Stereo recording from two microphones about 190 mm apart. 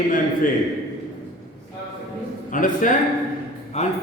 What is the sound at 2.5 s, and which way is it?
A man's voice, 45° left (ahead or behind).